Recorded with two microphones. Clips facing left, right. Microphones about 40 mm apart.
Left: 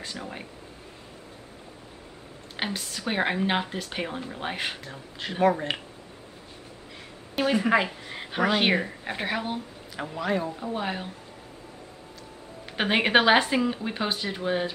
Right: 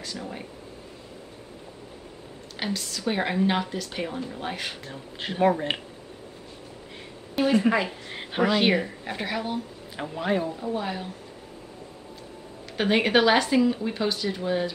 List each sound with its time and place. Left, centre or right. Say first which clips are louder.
0.0 s speech: right 1 dB; left
2.6 s speech: right 1 dB; left
3.0 s speech: right 1 dB; centre
5.3 s speech: right 1 dB; centre
7.3 s speech: right 3 dB; centre
8.1 s speech: right 3 dB; centre
8.5 s a woman's voice: right 1 dB; centre
9.9 s speech: right 1 dB; centre
10.5 s speech: right 1 dB; centre
12.7 s speech: even; left